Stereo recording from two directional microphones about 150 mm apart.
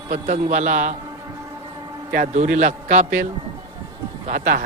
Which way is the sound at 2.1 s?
60° right (ahead or behind).